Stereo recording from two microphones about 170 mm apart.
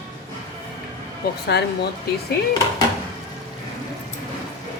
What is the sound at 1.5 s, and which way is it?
Speech, 75° left (ahead or behind).